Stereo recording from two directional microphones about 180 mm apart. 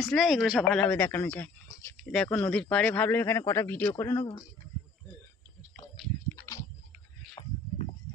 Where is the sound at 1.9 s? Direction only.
5° left (ahead or behind).